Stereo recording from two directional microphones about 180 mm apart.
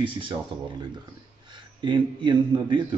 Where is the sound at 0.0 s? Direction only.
30° right (ahead or behind).